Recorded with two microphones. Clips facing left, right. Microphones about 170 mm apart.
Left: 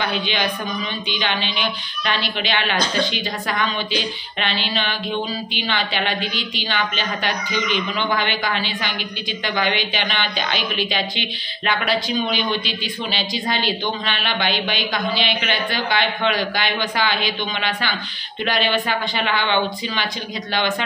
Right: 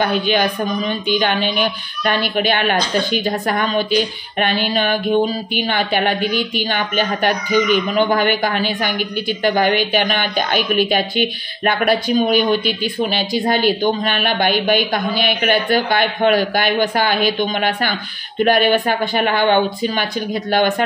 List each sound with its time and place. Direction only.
0.0 s speech: 45° right (ahead or behind)